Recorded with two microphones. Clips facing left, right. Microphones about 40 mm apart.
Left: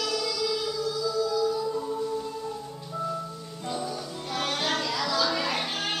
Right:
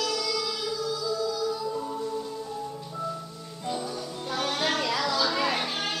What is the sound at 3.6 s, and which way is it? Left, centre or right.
Music, centre.